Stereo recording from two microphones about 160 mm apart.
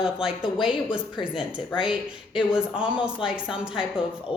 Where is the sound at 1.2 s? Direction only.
30° left (ahead or behind).